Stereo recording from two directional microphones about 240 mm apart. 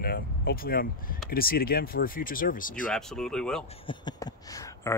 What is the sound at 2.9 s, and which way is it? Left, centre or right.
Speech, centre.